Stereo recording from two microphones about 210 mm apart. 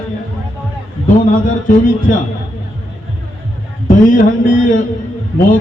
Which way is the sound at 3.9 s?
40° left (ahead or behind).